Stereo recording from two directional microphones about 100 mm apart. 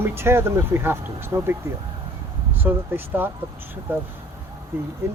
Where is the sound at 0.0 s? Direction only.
25° right (ahead or behind).